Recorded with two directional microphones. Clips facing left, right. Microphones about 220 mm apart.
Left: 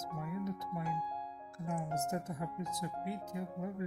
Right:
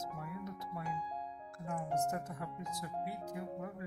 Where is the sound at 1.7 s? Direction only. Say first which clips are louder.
Right 1 dB; 20° left (ahead or behind).